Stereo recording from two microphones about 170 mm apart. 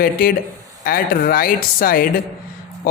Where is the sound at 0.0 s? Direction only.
60° left (ahead or behind).